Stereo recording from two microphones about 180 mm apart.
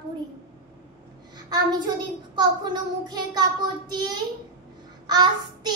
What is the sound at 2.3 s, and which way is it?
Child singing, 25° right (ahead or behind).